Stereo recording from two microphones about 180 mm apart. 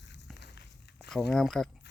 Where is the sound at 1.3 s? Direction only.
Centre (ahead or behind).